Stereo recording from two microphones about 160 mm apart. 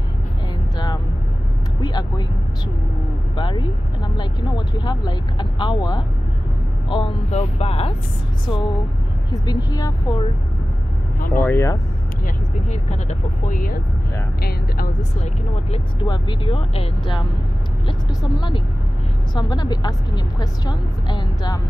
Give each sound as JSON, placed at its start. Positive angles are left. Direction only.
{"t": 0.7, "sound": "vehicle", "side_deg": 25}
{"t": 3.3, "sound": "speech", "side_deg": 30}
{"t": 8.5, "sound": "speech", "side_deg": 25}
{"t": 11.1, "sound": "speech", "side_deg": 60}
{"t": 11.4, "sound": "speech", "side_deg": 15}
{"t": 12.6, "sound": "speech", "side_deg": 45}
{"t": 15.0, "sound": "speech", "side_deg": 45}
{"t": 16.0, "sound": "speech", "side_deg": 30}